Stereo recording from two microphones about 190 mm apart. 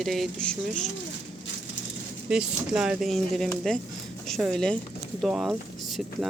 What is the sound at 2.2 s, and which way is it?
Speech, 5° right (ahead or behind).